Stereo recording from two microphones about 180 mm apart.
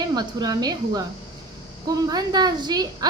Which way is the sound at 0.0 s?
20° right (ahead or behind).